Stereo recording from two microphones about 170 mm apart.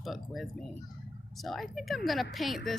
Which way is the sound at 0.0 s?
Centre (ahead or behind).